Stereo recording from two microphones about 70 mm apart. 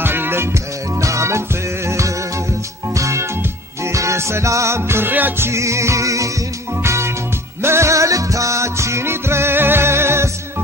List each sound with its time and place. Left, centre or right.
0.0 s music: right
5.5 s music: right